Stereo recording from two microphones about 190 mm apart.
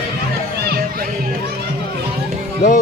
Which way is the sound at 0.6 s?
55° right (ahead or behind).